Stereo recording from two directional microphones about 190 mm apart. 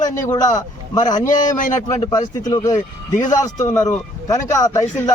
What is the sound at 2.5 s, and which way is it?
A man's voice, 20° left (ahead or behind).